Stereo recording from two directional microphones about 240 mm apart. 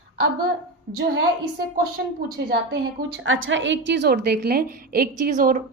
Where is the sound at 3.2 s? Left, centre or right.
Right.